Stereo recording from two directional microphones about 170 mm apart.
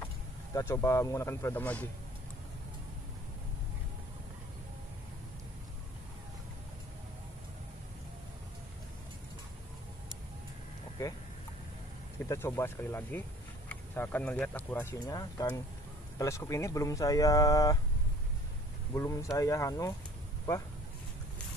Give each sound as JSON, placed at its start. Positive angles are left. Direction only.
{"t": 0.6, "sound": "speech", "side_deg": 15}
{"t": 12.3, "sound": "speech", "side_deg": 15}
{"t": 18.9, "sound": "speech", "side_deg": 20}